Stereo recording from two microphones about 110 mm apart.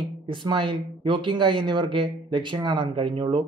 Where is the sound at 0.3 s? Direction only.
45° right (ahead or behind).